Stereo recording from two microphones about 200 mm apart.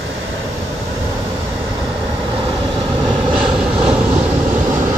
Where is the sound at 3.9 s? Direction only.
5° right (ahead or behind).